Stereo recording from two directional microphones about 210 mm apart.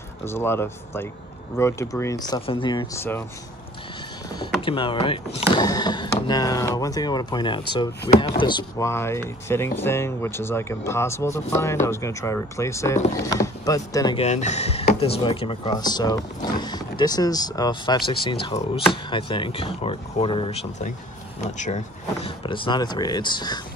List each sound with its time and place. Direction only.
0.2 s speech: 10° left (ahead or behind)
4.6 s speech: 25° left (ahead or behind)